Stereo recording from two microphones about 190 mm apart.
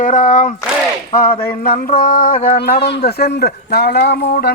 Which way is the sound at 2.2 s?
50° left (ahead or behind).